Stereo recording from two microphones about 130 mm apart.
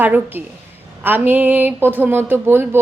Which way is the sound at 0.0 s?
15° right (ahead or behind).